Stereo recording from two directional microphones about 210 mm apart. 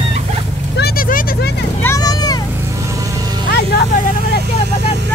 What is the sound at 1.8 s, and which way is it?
Vehicle, 15° left (ahead or behind).